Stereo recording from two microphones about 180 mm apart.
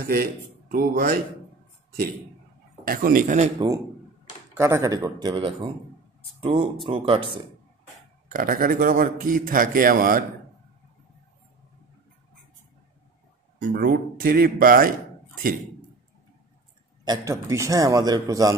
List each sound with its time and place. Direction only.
0.1 s a man's voice: 55° right (ahead or behind)
2.8 s a man's voice: 50° right (ahead or behind)
3.5 s a man's voice: 20° right (ahead or behind)
8.3 s a man's voice: 50° right (ahead or behind)
13.7 s speech: 60° right (ahead or behind)
17.0 s a man's voice: 20° right (ahead or behind)